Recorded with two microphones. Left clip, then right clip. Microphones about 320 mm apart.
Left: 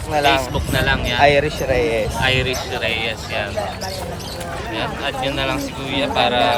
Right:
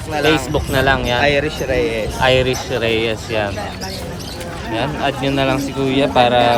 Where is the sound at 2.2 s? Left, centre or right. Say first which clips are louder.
Right 9 dB; centre.